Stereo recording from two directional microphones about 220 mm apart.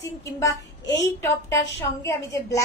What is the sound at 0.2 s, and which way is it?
A woman's voice, 15° left (ahead or behind).